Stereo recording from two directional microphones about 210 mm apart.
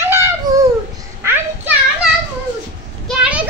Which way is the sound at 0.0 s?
10° right (ahead or behind).